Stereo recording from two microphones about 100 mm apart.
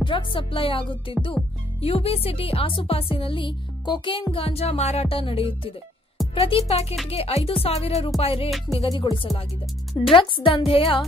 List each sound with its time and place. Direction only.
0.0 s music: 60° left (ahead or behind)
1.8 s speech: 75° left (ahead or behind); by 4.2 s 50° left (ahead or behind)
4.3 s speech: 70° left (ahead or behind)
6.3 s speech: 80° left
8.2 s speech: 70° left (ahead or behind)
8.9 s speech: 50° left (ahead or behind)
10.0 s music: 60° left (ahead or behind)